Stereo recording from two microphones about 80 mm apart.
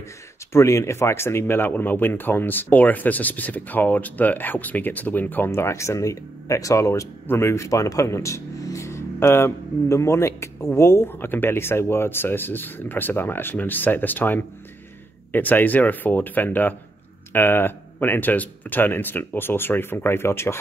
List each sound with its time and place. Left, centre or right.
0.5 s speech: left